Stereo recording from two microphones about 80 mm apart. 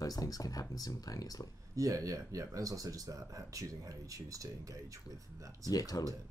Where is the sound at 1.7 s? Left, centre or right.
Right.